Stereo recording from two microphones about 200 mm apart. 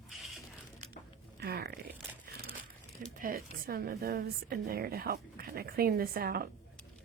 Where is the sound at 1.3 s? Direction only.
55° right (ahead or behind).